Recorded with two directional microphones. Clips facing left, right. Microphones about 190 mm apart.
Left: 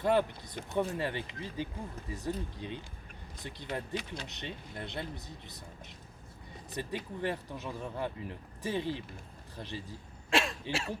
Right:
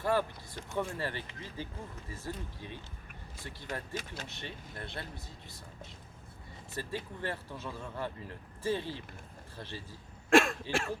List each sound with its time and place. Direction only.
0.0 s speech: 20° left (ahead or behind)
6.7 s speech: 15° left (ahead or behind)
10.2 s cough: 50° right (ahead or behind)